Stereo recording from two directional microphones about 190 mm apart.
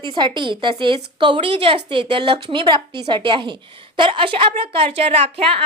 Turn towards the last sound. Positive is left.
turn(degrees=-30)  # may be behind; listen again after turning